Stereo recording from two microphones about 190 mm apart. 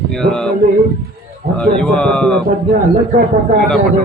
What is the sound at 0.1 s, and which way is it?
Speech, 5° left (ahead or behind).